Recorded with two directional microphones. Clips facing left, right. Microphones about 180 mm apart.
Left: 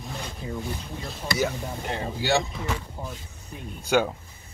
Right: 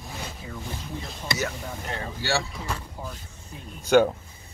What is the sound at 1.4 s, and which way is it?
Speech, 15° left (ahead or behind).